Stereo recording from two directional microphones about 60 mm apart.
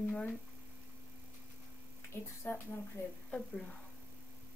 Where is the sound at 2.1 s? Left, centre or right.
Left.